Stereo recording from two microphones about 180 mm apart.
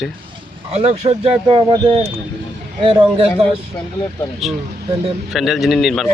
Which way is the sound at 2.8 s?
30° right (ahead or behind).